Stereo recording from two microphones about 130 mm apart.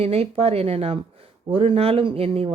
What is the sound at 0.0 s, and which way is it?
Speech, 50° right (ahead or behind).